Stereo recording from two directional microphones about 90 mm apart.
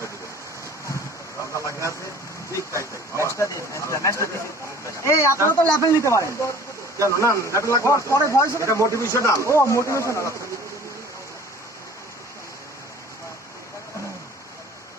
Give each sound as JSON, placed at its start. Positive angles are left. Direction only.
{"t": 1.5, "sound": "speech", "side_deg": 35}